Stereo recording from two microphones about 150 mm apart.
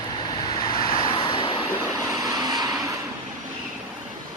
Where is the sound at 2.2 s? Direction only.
25° right (ahead or behind).